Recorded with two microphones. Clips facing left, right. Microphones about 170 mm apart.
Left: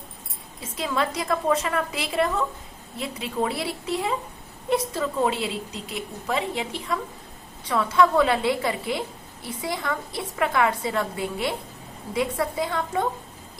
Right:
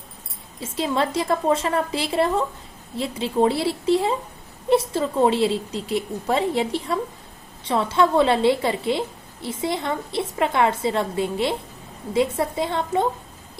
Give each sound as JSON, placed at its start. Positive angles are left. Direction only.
{"t": 0.6, "sound": "a woman's voice", "side_deg": -30}